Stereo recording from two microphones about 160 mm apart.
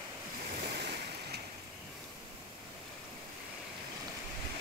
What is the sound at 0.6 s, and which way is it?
Waves, 80° right.